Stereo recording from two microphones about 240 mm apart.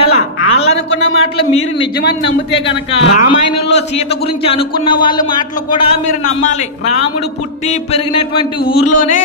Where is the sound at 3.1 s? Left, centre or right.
Left.